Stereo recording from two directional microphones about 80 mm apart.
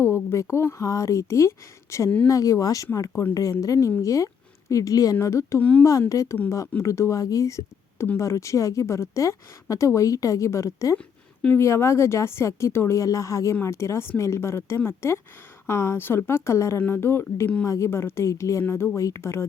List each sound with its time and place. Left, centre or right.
0.0 s speech: left
5.5 s speech: centre
5.8 s speech: left